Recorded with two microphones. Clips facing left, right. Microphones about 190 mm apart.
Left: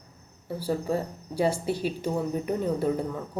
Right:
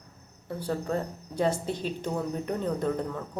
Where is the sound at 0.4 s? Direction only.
5° left (ahead or behind).